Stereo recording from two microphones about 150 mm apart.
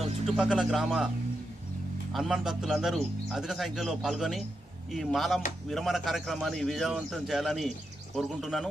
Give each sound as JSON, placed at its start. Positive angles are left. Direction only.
{"t": 0.3, "sound": "speech", "side_deg": -5}
{"t": 2.1, "sound": "speech", "side_deg": 0}